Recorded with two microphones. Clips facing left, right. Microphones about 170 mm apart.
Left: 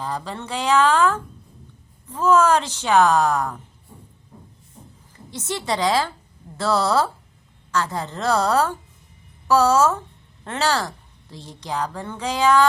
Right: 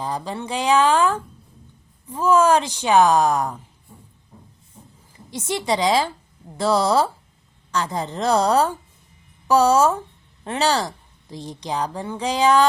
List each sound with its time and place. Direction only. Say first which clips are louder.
0.0 s a woman's voice: right 2 dB; 15° right (ahead or behind)
5.3 s a woman's voice: right 3 dB; 15° right (ahead or behind)